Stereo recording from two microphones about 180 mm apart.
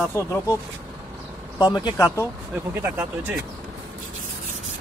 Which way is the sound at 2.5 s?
10° right (ahead or behind).